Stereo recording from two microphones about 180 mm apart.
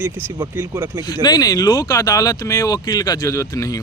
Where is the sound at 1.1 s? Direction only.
25° left (ahead or behind).